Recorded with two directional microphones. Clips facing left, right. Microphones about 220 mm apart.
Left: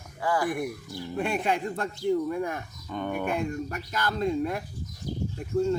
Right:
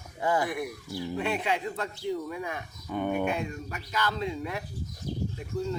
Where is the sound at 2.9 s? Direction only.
10° right (ahead or behind).